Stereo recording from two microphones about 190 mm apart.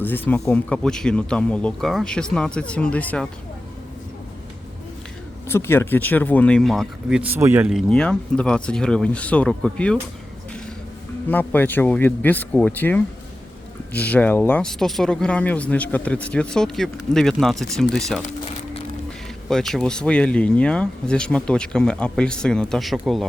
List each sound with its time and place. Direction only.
0.0 s speech: 10° left (ahead or behind)
5.5 s speech: 15° left (ahead or behind)
11.3 s speech: 10° left (ahead or behind)
19.5 s speech: centre (ahead or behind)